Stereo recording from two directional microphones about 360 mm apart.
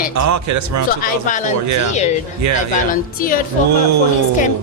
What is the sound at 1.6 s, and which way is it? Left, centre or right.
Speech, right.